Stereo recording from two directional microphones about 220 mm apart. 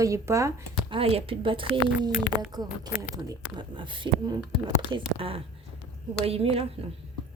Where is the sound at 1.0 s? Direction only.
25° right (ahead or behind).